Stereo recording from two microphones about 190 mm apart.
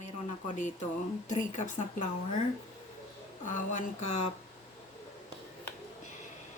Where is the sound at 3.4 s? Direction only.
40° left (ahead or behind).